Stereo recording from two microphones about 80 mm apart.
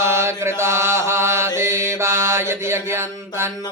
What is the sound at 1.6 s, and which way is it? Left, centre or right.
Mantra, right.